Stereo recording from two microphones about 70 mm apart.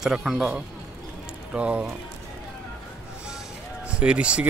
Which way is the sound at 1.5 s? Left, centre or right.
Centre.